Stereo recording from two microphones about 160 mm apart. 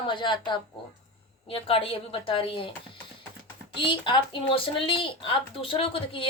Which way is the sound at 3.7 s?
30° left (ahead or behind).